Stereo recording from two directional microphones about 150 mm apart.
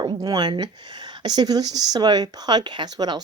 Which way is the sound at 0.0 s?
30° right (ahead or behind).